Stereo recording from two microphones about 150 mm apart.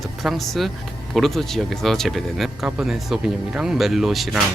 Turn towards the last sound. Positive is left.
turn(degrees=0)  # may be behind; listen again after turning